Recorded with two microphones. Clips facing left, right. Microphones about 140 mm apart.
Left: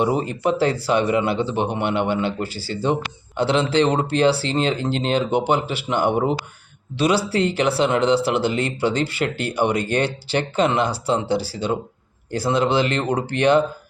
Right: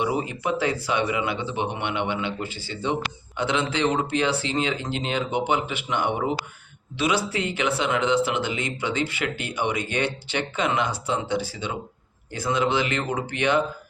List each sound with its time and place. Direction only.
0.0 s speech: 40° left (ahead or behind)